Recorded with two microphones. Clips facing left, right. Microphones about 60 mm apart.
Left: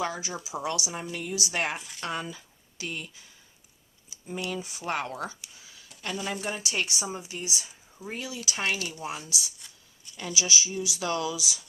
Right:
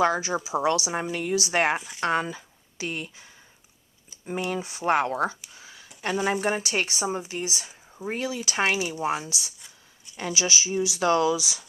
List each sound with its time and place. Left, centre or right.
0.0 s speech: right
0.6 s speech: right
4.1 s a sound: centre
4.4 s speech: right